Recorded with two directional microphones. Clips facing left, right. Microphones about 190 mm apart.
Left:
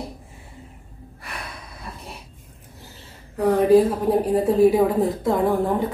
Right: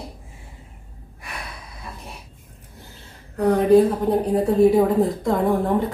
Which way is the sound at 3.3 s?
5° left (ahead or behind).